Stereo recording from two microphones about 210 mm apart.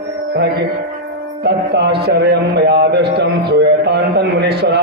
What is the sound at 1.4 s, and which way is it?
Mantra, 50° right (ahead or behind).